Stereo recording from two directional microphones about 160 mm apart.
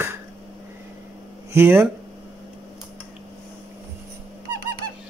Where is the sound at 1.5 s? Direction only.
15° right (ahead or behind).